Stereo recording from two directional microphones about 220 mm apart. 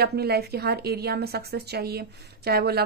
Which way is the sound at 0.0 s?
45° right (ahead or behind).